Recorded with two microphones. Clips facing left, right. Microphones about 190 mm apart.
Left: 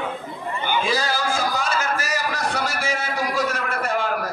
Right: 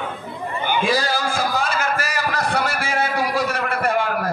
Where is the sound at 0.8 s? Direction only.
55° right (ahead or behind).